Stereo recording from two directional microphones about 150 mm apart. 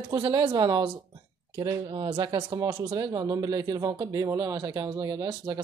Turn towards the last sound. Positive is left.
turn(degrees=-25)  # may be behind; listen again after turning